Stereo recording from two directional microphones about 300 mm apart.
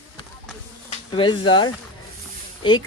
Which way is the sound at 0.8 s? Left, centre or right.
Centre.